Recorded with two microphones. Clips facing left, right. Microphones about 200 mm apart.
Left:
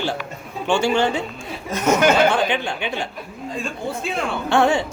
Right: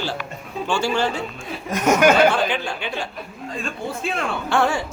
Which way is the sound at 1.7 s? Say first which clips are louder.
Right 1 dB; 10° right (ahead or behind).